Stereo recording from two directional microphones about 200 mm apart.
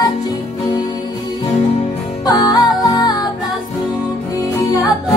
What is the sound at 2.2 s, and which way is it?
Music, 20° left (ahead or behind).